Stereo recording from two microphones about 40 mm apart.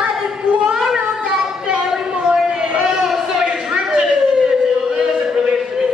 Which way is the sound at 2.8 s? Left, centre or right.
Centre.